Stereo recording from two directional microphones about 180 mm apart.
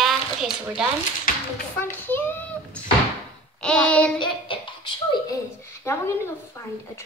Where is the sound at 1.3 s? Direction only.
50° left (ahead or behind).